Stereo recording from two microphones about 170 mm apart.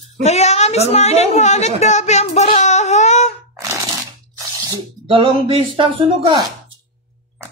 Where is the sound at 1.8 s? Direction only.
40° left (ahead or behind).